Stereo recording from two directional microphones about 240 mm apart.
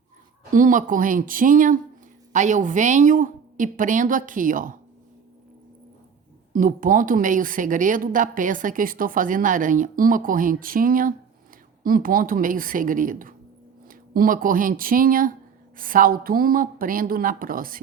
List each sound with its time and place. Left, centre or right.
0.5 s a woman's voice: right
6.5 s a woman's voice: right